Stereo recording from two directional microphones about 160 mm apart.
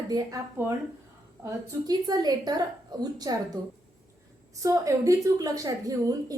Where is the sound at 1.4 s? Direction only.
25° right (ahead or behind).